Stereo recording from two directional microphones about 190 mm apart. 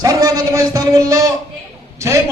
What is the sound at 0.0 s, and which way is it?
Speech, 15° right (ahead or behind).